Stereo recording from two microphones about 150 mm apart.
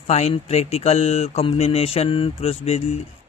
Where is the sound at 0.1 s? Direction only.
45° left (ahead or behind).